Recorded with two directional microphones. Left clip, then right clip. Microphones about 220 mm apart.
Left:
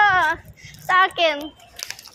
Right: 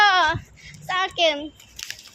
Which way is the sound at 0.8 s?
10° left (ahead or behind).